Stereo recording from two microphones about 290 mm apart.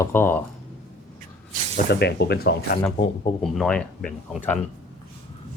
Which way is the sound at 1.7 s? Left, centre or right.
Left.